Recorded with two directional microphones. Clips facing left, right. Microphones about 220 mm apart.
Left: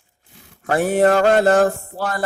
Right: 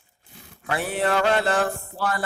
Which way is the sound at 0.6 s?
45° left (ahead or behind).